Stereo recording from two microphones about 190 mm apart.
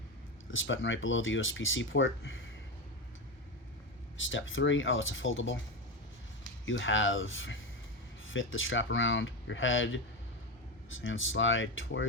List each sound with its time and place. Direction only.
0.5 s speech: 90° left
4.2 s speech: 90° left
6.7 s speech: 85° left